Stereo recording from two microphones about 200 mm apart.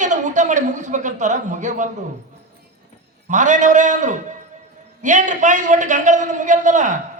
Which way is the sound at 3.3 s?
40° right (ahead or behind).